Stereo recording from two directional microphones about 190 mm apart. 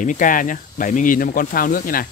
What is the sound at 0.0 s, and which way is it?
Speech, 45° left (ahead or behind).